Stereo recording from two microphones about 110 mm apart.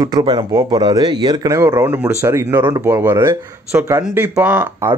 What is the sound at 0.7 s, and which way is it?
Speech, 45° right (ahead or behind).